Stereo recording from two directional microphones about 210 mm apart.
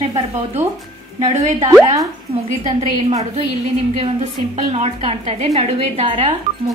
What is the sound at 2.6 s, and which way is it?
Speech, 30° right (ahead or behind).